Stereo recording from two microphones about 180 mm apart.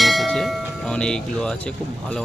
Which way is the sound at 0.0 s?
Centre (ahead or behind).